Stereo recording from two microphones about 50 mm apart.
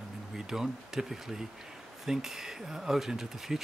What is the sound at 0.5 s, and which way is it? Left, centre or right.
Speech, centre.